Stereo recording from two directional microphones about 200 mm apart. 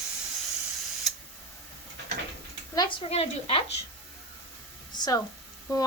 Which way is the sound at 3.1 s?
30° left (ahead or behind).